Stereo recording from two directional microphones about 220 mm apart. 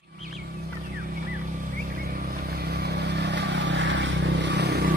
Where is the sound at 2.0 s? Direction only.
40° right (ahead or behind).